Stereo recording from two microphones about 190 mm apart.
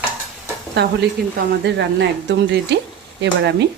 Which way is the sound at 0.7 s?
60° right (ahead or behind).